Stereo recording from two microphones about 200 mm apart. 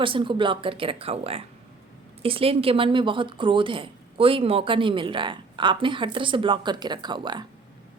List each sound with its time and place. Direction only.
0.0 s speech: 25° right (ahead or behind)